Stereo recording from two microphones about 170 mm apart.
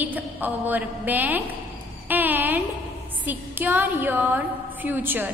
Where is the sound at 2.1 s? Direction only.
10° right (ahead or behind).